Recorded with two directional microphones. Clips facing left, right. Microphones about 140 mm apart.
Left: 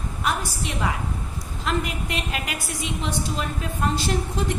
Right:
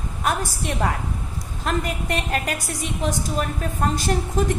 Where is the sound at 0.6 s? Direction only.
45° right (ahead or behind).